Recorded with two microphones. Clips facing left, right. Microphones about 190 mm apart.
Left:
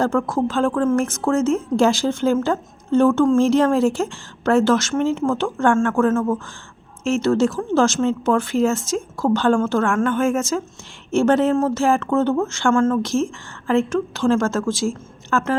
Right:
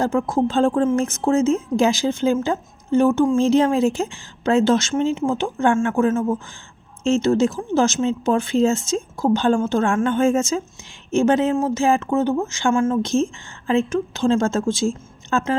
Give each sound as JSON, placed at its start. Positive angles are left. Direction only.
{"t": 0.0, "sound": "a woman's voice", "side_deg": -20}